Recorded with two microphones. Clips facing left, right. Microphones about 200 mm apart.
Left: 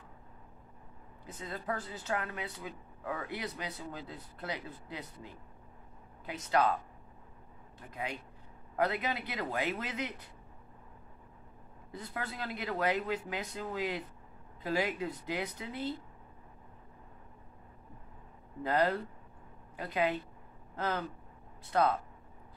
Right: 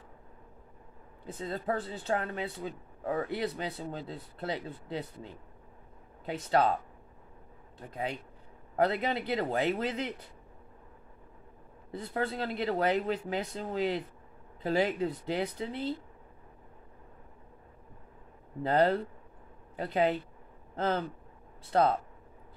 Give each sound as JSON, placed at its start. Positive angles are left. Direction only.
{"t": 1.2, "sound": "speech", "side_deg": -30}
{"t": 7.9, "sound": "speech", "side_deg": -30}
{"t": 11.9, "sound": "speech", "side_deg": -30}
{"t": 18.6, "sound": "speech", "side_deg": -30}